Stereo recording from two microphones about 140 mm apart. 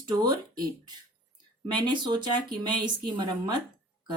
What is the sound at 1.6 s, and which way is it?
Speech, 30° right (ahead or behind).